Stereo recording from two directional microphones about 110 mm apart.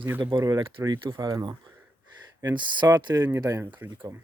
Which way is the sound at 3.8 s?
45° right (ahead or behind).